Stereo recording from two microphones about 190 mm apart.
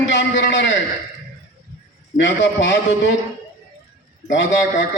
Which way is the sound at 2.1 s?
70° left (ahead or behind).